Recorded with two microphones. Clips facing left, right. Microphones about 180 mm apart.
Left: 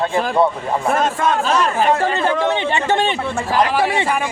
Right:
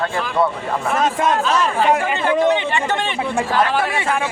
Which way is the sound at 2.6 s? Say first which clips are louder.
Left 3 dB; 30° left (ahead or behind).